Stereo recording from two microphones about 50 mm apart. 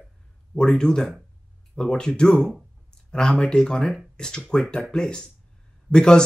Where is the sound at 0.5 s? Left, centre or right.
Centre.